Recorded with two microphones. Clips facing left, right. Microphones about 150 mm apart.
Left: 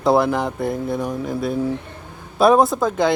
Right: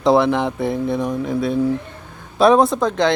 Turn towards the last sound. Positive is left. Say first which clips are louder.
# right 1 dB
turn(degrees=5)  # may be behind; listen again after turning